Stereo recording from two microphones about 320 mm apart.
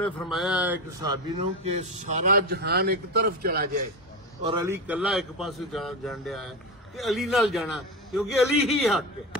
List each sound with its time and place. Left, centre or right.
0.0 s a man's voice: centre
1.4 s a man's voice: centre
4.4 s a man's voice: centre